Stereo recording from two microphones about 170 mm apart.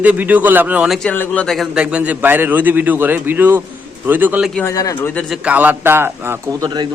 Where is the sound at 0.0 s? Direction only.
10° right (ahead or behind).